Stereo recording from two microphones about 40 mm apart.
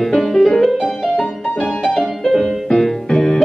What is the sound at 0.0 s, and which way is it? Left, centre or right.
Music, centre.